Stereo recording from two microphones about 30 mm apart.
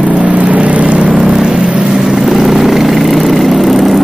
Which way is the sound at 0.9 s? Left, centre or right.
Right.